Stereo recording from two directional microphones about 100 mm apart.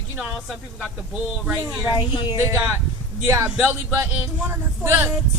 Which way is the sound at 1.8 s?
50° left (ahead or behind).